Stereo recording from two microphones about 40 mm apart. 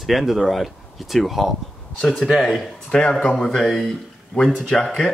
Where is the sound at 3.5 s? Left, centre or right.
Centre.